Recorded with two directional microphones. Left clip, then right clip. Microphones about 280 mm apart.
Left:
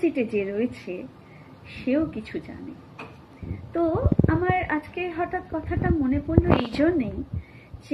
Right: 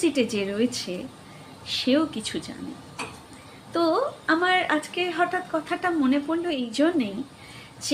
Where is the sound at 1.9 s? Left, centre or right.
Centre.